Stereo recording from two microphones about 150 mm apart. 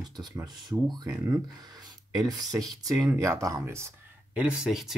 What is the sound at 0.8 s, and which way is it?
Speech, 25° right (ahead or behind).